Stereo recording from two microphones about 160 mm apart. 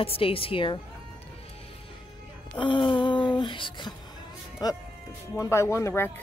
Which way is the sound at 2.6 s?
30° left (ahead or behind).